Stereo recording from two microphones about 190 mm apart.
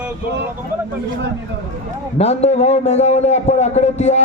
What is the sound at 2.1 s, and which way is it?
A man's voice, 35° left (ahead or behind).